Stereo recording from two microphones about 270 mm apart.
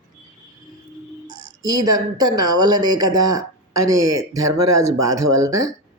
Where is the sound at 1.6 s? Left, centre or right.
Centre.